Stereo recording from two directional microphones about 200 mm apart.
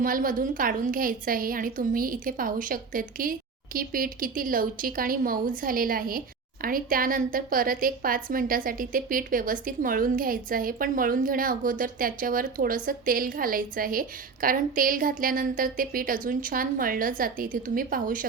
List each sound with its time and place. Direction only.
0.0 s a woman's voice: 45° right (ahead or behind)